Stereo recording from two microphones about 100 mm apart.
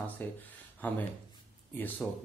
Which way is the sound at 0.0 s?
15° left (ahead or behind).